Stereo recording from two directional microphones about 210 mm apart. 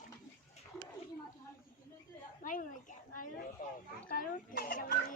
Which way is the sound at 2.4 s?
40° left (ahead or behind).